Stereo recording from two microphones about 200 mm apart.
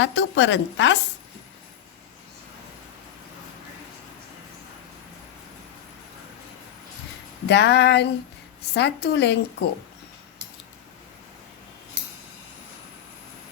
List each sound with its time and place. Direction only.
0.0 s a woman's voice: 65° left (ahead or behind)
7.4 s speech: 60° left (ahead or behind)